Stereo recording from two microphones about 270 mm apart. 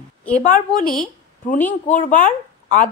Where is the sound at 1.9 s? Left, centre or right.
Left.